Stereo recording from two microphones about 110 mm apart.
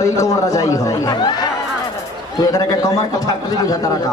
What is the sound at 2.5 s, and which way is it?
Speech, 35° left (ahead or behind).